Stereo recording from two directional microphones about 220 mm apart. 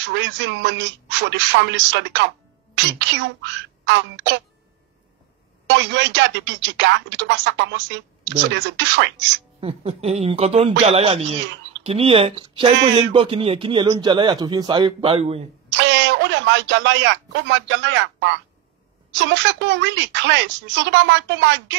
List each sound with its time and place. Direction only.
0.1 s speech: 55° right (ahead or behind)
5.7 s speech: 55° right (ahead or behind)
9.6 s speech: 25° right (ahead or behind)
15.8 s speech: 55° right (ahead or behind)